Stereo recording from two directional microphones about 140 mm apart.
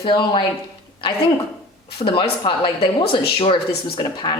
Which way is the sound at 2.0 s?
40° left (ahead or behind).